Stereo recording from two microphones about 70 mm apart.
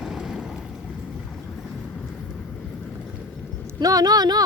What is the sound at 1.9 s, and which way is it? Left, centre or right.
Vehicle, left.